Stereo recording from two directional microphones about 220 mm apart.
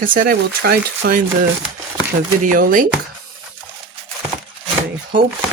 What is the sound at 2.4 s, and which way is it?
Speech, 40° right (ahead or behind).